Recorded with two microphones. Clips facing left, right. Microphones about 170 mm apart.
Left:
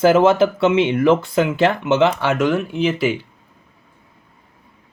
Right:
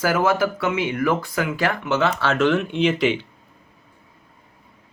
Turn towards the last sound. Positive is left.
turn(degrees=5)  # may be behind; listen again after turning